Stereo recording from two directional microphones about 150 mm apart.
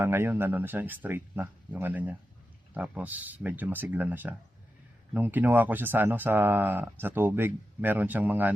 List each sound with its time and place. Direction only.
0.0 s speech: 15° right (ahead or behind)